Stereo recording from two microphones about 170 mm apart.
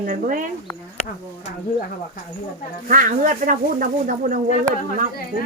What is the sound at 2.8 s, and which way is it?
Speech, 50° right (ahead or behind).